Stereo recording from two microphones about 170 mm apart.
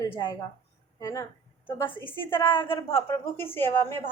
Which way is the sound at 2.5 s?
30° left (ahead or behind).